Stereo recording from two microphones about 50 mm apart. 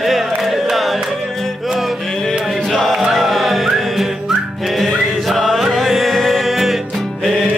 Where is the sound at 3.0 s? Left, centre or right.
Centre.